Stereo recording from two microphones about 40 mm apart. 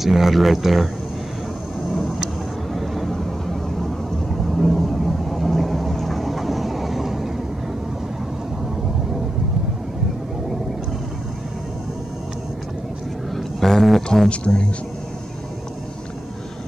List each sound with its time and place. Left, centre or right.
0.0 s speech: centre
2.7 s vehicle: centre
13.4 s a sound: centre
14.3 s speech: left